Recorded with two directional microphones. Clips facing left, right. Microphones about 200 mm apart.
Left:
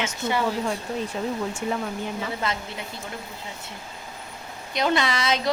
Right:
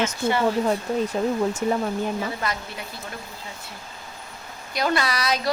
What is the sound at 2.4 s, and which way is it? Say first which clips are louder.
Speech: even; 20° left (ahead or behind).